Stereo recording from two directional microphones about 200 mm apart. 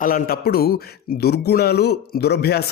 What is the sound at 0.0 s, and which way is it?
Speech, 45° left (ahead or behind).